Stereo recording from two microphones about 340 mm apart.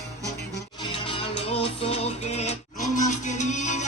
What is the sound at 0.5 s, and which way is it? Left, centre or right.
Music, centre.